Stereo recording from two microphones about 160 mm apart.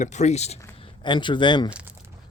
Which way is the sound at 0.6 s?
30° left (ahead or behind).